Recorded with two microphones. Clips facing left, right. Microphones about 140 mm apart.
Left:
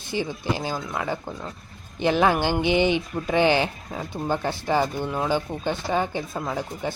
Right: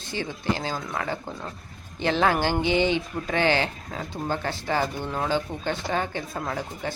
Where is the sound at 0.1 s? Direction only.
15° left (ahead or behind).